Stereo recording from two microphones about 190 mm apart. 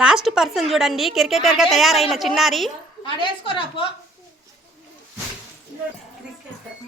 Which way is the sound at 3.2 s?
25° left (ahead or behind).